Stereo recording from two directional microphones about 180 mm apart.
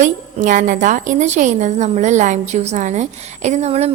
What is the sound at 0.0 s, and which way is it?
A woman's voice, 45° right (ahead or behind).